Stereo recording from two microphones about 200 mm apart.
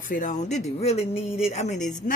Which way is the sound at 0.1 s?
40° left (ahead or behind).